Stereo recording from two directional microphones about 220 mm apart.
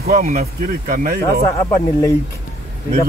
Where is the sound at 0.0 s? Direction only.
40° right (ahead or behind).